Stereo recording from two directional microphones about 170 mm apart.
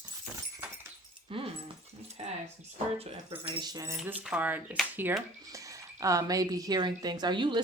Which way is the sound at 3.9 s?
10° right (ahead or behind).